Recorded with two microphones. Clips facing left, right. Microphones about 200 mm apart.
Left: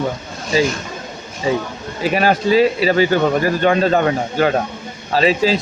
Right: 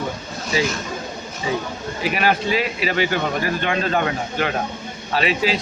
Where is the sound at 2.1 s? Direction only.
35° left (ahead or behind).